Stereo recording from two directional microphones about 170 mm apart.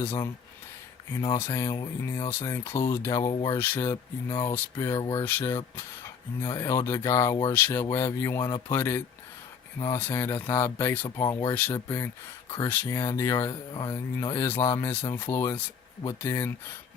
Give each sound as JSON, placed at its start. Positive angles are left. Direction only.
{"t": 1.1, "sound": "speech", "side_deg": 15}
{"t": 11.0, "sound": "speech", "side_deg": 25}
{"t": 11.5, "sound": "speech", "side_deg": 15}